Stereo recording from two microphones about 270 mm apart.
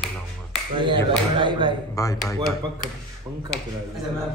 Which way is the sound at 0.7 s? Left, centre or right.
Centre.